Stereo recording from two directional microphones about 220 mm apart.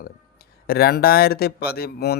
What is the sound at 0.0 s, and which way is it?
Speech, 45° left (ahead or behind).